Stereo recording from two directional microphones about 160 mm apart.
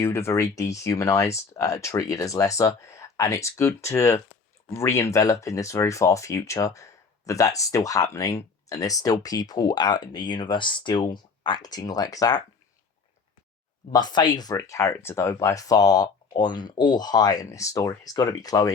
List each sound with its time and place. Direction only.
0.0 s speech: 15° left (ahead or behind)
13.9 s speech: 25° left (ahead or behind)